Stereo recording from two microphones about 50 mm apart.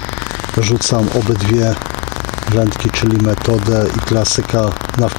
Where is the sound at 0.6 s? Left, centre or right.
Centre.